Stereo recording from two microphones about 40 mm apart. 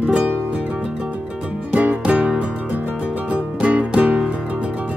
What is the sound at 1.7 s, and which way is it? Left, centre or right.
Music, right.